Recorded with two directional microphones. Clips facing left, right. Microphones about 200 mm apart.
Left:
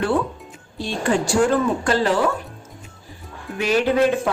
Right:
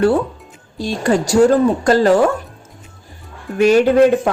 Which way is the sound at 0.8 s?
40° right (ahead or behind).